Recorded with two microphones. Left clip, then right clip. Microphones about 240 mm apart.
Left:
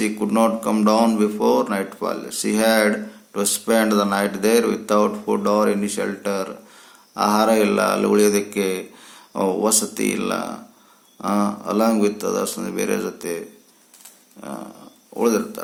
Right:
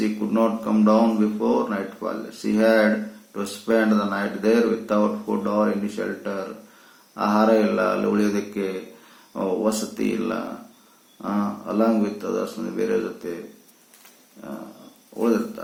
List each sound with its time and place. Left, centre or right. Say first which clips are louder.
0.0 s speech: left 3 dB; left